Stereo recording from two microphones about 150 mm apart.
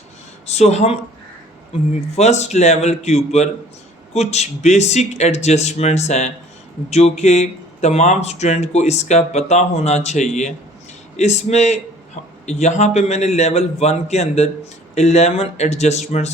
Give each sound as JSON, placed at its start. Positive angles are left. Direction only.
{"t": 0.4, "sound": "speech", "side_deg": 45}
{"t": 2.1, "sound": "speech", "side_deg": 50}